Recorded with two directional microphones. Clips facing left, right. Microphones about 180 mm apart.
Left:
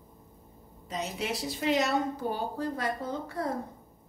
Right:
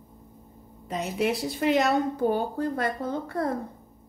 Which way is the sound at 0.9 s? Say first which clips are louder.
Right 7 dB; 60° right (ahead or behind).